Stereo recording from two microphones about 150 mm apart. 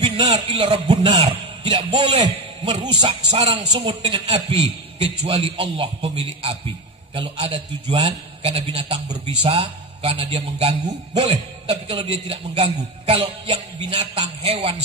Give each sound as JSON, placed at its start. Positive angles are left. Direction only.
{"t": 0.0, "sound": "a man's voice", "side_deg": -30}